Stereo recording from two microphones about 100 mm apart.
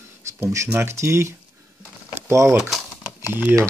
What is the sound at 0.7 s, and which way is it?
Speech, 25° right (ahead or behind).